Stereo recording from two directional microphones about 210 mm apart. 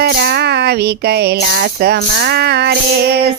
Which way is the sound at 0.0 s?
50° right (ahead or behind).